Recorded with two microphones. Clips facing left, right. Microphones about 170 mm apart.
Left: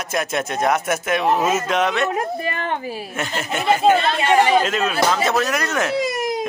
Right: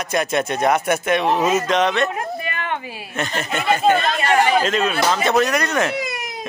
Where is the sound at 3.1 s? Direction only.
5° left (ahead or behind).